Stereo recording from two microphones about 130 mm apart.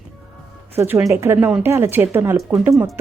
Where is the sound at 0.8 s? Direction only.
20° right (ahead or behind).